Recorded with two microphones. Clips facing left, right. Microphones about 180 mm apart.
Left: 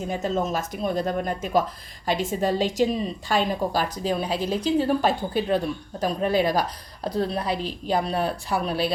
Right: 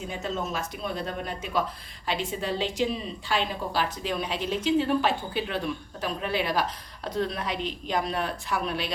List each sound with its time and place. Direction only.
0.1 s a woman's voice: 45° left (ahead or behind)